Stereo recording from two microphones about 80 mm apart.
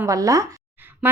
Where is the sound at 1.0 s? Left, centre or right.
Right.